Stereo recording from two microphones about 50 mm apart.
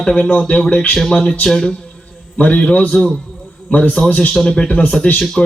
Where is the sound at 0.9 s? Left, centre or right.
Centre.